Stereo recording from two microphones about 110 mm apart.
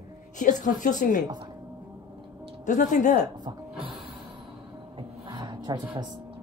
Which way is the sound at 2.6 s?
90° left.